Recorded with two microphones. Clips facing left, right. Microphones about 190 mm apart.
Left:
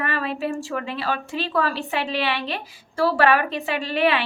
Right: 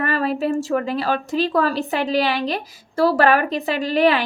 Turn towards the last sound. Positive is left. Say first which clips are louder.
# right 4 dB
turn(degrees=-40)  # may be behind; listen again after turning